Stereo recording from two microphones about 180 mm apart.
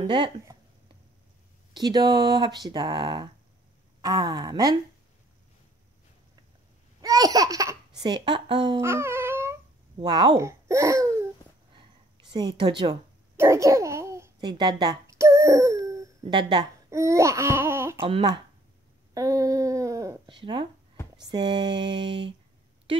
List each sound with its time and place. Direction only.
0.0 s speech: 25° right (ahead or behind)
1.7 s speech: 25° right (ahead or behind)
7.0 s speech: 20° right (ahead or behind)
8.8 s dog: 15° right (ahead or behind)
9.9 s speech: 25° right (ahead or behind)
11.7 s a sound: 25° right (ahead or behind)
13.4 s babbling: 15° right (ahead or behind)
18.0 s speech: 25° right (ahead or behind)
19.1 s a sound: 20° right (ahead or behind)
21.2 s speech: 25° right (ahead or behind)